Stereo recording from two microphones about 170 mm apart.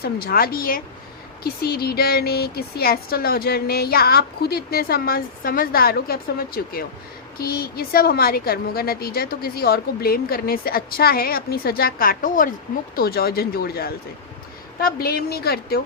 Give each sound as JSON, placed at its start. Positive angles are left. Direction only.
{"t": 0.0, "sound": "speech", "side_deg": 60}
{"t": 13.0, "sound": "speech", "side_deg": 65}